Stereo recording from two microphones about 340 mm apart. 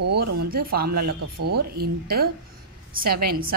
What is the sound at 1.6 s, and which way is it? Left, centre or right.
A woman's voice, right.